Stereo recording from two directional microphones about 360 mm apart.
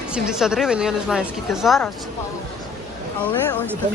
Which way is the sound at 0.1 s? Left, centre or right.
Centre.